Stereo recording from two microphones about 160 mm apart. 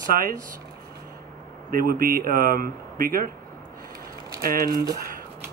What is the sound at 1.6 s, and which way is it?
Speech, 65° right (ahead or behind).